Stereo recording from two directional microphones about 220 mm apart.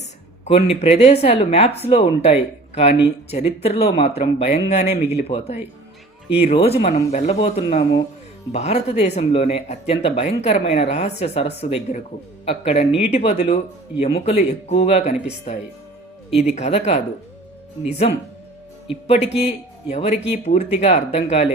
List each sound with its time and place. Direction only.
0.4 s speech: 30° left (ahead or behind)
18.0 s speech: 25° left (ahead or behind)